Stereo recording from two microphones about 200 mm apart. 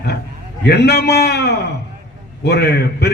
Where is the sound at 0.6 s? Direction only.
55° left (ahead or behind).